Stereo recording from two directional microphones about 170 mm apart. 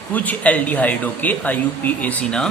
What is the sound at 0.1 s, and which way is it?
Speech, 10° left (ahead or behind).